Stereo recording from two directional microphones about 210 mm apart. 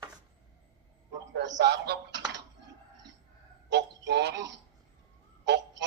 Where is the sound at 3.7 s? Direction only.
55° right (ahead or behind).